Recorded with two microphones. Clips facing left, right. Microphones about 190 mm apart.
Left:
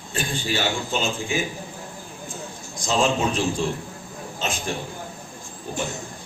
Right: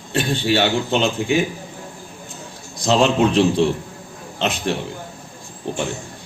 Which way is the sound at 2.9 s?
65° right (ahead or behind).